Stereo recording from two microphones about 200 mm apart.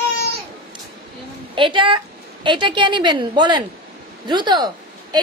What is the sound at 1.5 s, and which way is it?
A woman's voice, 25° right (ahead or behind).